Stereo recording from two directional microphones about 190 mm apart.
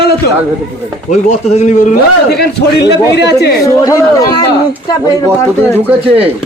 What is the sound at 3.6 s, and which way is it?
Speech, 15° left (ahead or behind).